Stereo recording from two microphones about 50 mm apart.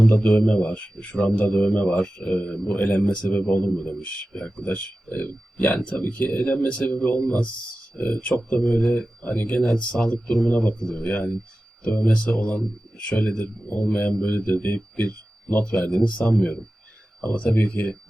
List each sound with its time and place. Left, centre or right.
0.1 s speech: left
1.1 s speech: centre
4.4 s speech: centre
4.6 s speech: left
14.3 s a man's voice: left